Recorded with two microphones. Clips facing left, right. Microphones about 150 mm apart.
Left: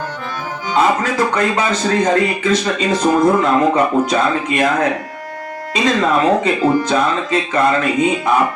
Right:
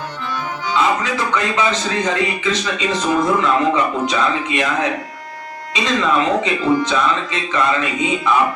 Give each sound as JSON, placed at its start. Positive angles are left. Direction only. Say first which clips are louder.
{"t": 0.7, "sound": "speech", "louder": "left 3 dB", "side_deg": 45}